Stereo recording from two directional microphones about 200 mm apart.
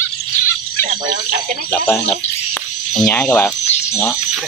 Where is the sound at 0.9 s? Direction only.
40° right (ahead or behind).